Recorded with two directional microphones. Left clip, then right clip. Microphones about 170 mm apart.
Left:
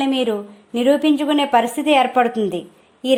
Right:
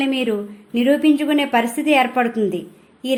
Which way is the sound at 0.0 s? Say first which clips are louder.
Left 1 dB; 35° left (ahead or behind).